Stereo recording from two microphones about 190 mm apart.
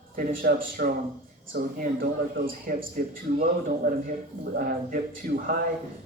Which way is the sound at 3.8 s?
40° right (ahead or behind).